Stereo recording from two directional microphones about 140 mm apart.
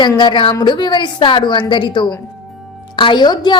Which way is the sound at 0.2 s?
35° left (ahead or behind).